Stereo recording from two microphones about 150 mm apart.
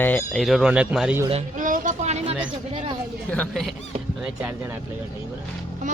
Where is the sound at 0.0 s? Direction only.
10° left (ahead or behind).